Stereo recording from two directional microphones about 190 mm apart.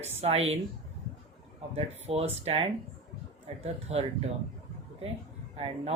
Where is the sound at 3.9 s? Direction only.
35° right (ahead or behind).